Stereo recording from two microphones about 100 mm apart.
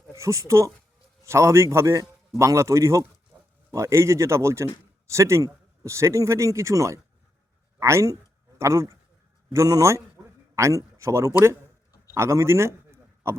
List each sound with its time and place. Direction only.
0.2 s a man's voice: 30° right (ahead or behind)